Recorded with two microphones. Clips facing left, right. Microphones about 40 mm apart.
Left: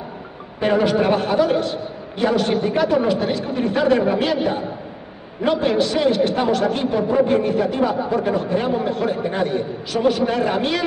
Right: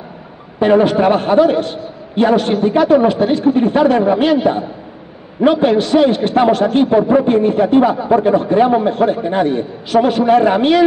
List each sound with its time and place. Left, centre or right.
0.6 s a man's voice: right
5.4 s a man's voice: right